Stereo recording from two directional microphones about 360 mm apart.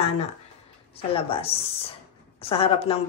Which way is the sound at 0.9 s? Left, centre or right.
Centre.